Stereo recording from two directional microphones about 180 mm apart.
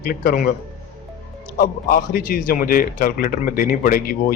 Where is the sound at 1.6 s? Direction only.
50° left (ahead or behind).